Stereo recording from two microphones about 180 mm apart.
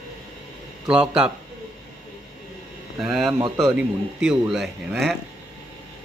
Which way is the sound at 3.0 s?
5° right (ahead or behind).